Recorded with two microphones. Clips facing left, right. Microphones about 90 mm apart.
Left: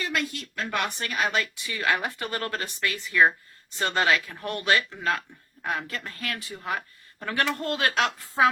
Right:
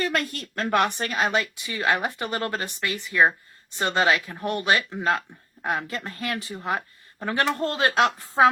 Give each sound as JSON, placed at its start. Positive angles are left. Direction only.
{"t": 0.0, "sound": "speech", "side_deg": -45}
{"t": 0.7, "sound": "a woman's voice", "side_deg": -30}